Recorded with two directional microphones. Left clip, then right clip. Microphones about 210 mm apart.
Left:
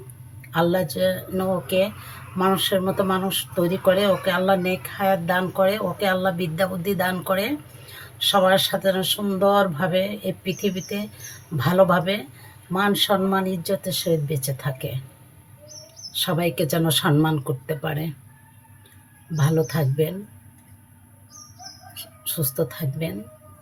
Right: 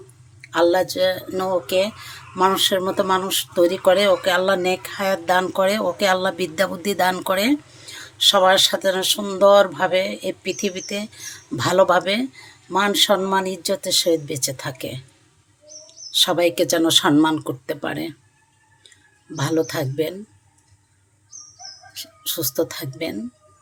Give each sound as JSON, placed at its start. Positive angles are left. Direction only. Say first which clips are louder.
{"t": 0.5, "sound": "speech", "louder": "right 4 dB", "side_deg": -50}
{"t": 16.1, "sound": "speech", "louder": "right 6 dB", "side_deg": -50}
{"t": 19.4, "sound": "speech", "louder": "right 2 dB", "side_deg": -55}
{"t": 21.9, "sound": "speech", "louder": "right 5 dB", "side_deg": -50}